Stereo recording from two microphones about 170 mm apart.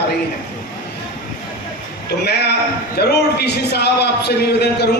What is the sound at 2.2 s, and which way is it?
A man's voice, 75° left (ahead or behind).